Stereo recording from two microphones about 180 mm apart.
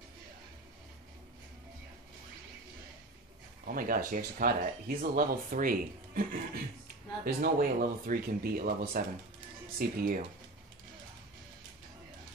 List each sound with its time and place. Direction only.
3.6 s speech: 50° right (ahead or behind)